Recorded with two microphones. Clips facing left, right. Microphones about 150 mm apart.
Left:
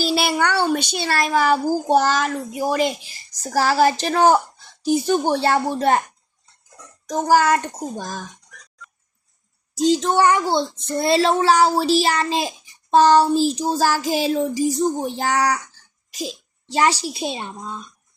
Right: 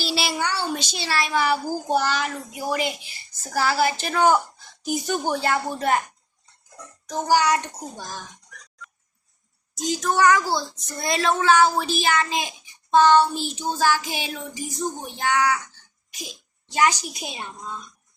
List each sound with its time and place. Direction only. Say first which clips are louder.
0.0 s speech: left 6 dB; 50° left (ahead or behind); by 6.0 s 30° left (ahead or behind)
7.1 s a child's voice: left 4 dB; 45° left (ahead or behind)
9.7 s a child's voice: left 6 dB; 30° left (ahead or behind)